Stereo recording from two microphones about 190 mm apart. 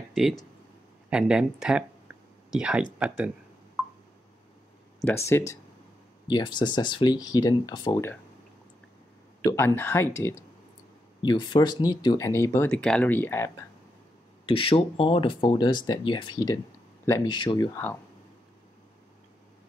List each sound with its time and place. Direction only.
0.1 s speech: centre (ahead or behind)
5.0 s speech: 15° left (ahead or behind)
9.4 s speech: 15° left (ahead or behind)
14.4 s speech: 30° left (ahead or behind)